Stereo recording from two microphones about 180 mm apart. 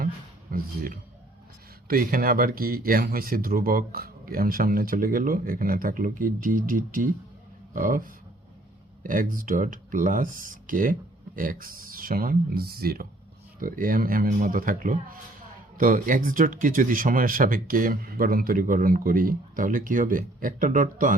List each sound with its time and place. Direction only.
0.5 s speech: 55° right (ahead or behind)